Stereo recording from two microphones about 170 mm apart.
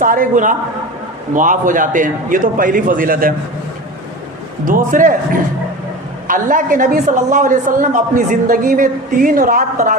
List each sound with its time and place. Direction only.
0.0 s a woman's voice: 55° right (ahead or behind)
4.6 s a woman's voice: 50° right (ahead or behind)